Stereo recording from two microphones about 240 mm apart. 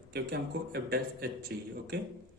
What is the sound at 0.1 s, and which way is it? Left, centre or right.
A man's voice, right.